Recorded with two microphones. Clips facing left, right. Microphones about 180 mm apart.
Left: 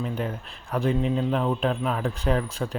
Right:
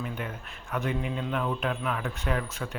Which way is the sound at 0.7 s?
35° left (ahead or behind).